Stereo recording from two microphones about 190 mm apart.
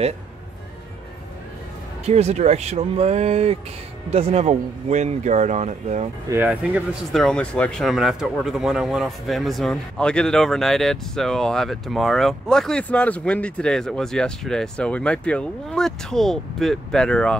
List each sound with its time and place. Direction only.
2.0 s speech: 35° right (ahead or behind)
6.2 s speech: 10° right (ahead or behind)